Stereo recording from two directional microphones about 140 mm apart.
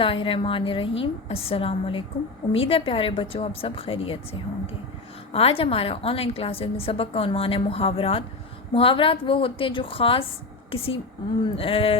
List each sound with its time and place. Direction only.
0.0 s a woman's voice: 40° left (ahead or behind)